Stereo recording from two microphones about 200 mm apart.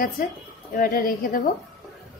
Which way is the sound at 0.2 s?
45° left (ahead or behind).